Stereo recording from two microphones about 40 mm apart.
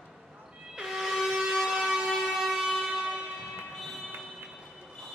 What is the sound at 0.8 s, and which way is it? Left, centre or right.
Vehicle, centre.